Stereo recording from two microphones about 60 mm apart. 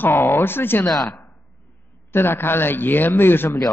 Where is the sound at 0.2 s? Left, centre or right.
Left.